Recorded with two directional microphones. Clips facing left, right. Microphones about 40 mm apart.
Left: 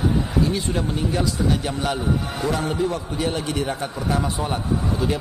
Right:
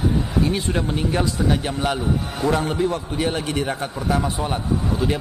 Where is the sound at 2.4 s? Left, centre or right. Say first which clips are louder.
Right 4 dB; right.